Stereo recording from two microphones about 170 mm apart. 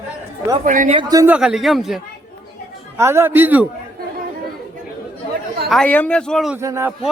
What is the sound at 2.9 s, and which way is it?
Speech, 15° right (ahead or behind).